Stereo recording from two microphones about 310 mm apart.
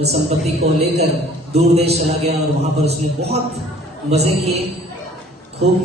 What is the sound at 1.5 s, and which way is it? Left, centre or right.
A man's voice, centre.